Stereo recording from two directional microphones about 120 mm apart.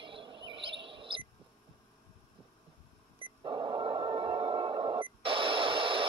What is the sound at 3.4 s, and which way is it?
Radio, 45° right (ahead or behind).